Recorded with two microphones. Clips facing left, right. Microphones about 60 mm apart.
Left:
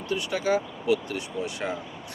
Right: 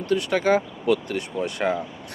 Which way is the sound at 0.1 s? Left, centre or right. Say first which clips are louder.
Right 5 dB; right.